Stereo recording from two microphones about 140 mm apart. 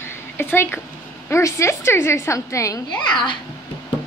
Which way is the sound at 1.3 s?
20° left (ahead or behind).